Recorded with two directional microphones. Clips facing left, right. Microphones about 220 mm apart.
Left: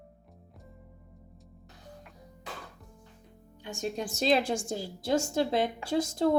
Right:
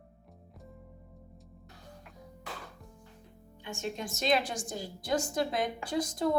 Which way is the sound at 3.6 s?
35° left (ahead or behind).